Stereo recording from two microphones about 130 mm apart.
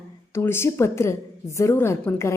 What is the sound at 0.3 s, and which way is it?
A woman's voice, 20° left (ahead or behind).